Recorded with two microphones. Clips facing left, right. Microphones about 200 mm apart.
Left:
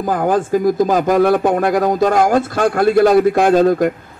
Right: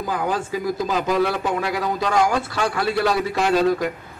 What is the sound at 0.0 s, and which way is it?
A man's voice, 50° left (ahead or behind).